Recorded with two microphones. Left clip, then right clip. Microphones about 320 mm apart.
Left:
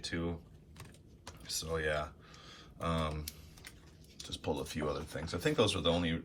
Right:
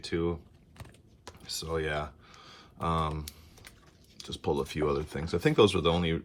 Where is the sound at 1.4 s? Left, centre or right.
Centre.